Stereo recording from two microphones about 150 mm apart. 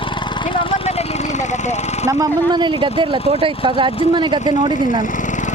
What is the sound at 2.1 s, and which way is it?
Speech, 20° right (ahead or behind).